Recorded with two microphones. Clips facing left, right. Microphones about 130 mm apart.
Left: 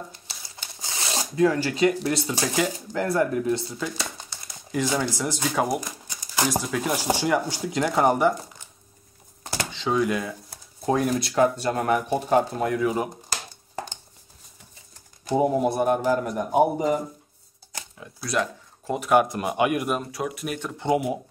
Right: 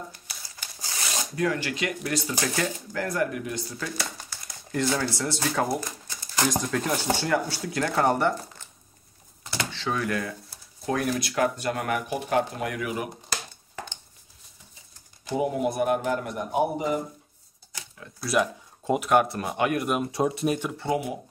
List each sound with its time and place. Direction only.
0.1 s shuffling cards: 25° left (ahead or behind)
2.9 s speech: 25° left (ahead or behind)
3.7 s a sound: 20° left (ahead or behind)
4.7 s speech: 15° left (ahead or behind)
9.7 s speech: 20° left (ahead or behind)
10.9 s speech: 30° left (ahead or behind)
15.3 s speech: 40° left (ahead or behind)
18.2 s speech: 5° right (ahead or behind)
19.2 s speech: 15° left (ahead or behind)
20.1 s speech: 25° right (ahead or behind)
20.7 s speech: 20° left (ahead or behind)